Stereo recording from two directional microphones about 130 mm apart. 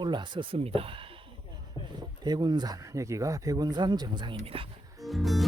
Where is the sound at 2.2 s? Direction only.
35° right (ahead or behind).